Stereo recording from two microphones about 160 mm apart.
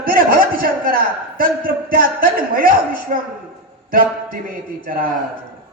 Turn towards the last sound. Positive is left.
turn(degrees=-60)  # may be behind; listen again after turning